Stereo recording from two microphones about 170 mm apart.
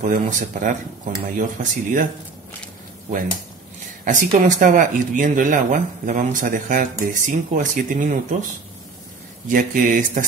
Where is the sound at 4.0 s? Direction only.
50° right (ahead or behind).